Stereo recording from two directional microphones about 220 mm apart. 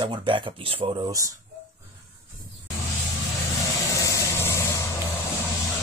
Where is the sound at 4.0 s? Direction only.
15° left (ahead or behind).